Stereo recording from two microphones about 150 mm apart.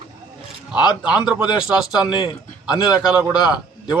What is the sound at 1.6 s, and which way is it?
Speech, 5° right (ahead or behind).